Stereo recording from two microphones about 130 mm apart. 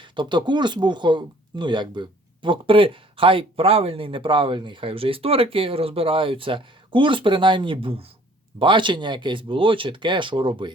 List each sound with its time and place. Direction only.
0.0 s speech: 40° right (ahead or behind)